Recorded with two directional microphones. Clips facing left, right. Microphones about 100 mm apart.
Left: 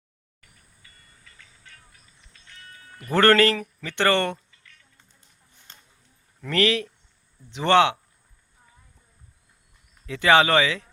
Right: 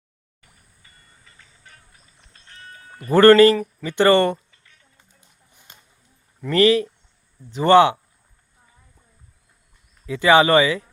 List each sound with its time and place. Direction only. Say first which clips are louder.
0.8 s train: right 1 dB; 30° right (ahead or behind)
2.3 s music: right 5 dB; 35° right (ahead or behind)
3.1 s speech: right 7 dB; 5° right (ahead or behind)
5.5 s a sound: right 2 dB; 15° right (ahead or behind)
6.4 s speech: right 7 dB; 5° right (ahead or behind)
10.1 s speech: right 4 dB; 5° right (ahead or behind)